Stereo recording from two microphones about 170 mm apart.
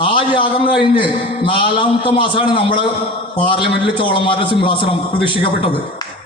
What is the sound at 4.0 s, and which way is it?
A man's voice, 30° left (ahead or behind).